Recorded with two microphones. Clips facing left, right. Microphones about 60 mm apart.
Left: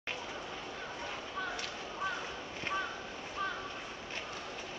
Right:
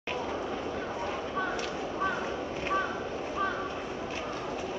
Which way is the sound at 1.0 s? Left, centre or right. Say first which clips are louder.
Right 6 dB; right.